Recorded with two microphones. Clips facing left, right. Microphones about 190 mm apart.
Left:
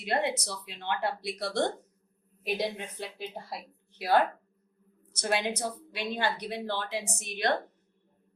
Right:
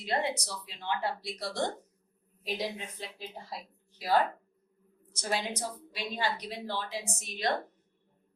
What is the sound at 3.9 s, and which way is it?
Speech, 60° left (ahead or behind).